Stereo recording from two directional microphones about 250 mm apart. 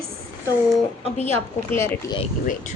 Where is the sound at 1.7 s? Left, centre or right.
Centre.